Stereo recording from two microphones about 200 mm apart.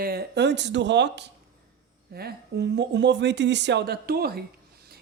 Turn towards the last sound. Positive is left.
turn(degrees=-50)  # may be behind; listen again after turning